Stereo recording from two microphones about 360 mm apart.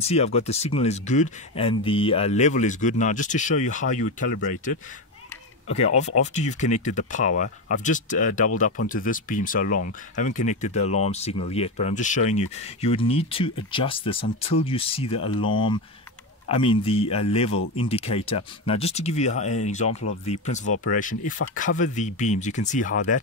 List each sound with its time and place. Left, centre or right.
0.0 s speech: centre